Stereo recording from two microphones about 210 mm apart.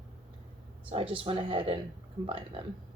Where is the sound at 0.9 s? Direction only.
25° right (ahead or behind).